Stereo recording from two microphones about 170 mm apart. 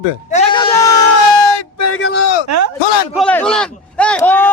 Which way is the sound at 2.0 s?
90° left.